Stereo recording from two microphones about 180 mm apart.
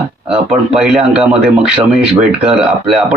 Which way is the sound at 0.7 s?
5° right (ahead or behind).